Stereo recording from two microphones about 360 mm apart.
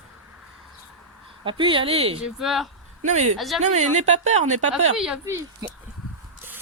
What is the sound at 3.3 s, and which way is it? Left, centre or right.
Speech, centre.